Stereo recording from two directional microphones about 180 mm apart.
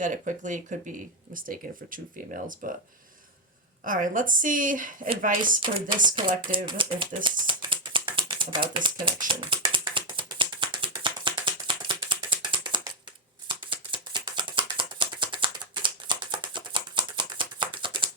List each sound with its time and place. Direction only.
0.0 s speech: 45° right (ahead or behind)
3.8 s speech: 50° right (ahead or behind)
6.7 s speech: 30° right (ahead or behind)
7.3 s a sound: 25° right (ahead or behind)